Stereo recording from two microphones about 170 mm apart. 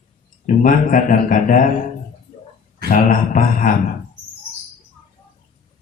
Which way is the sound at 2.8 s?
50° left (ahead or behind).